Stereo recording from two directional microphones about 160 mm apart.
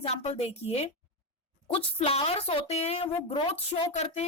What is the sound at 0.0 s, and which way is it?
A woman's voice, 35° left (ahead or behind).